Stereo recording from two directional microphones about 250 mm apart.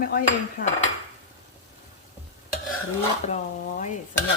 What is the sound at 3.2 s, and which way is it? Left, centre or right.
Speech, left.